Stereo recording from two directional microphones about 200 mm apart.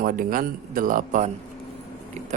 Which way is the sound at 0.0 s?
45° right (ahead or behind).